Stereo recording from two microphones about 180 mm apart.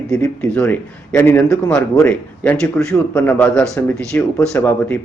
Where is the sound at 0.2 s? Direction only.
5° left (ahead or behind).